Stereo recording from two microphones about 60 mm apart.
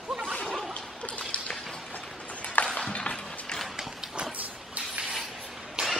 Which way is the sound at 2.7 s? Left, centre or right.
Centre.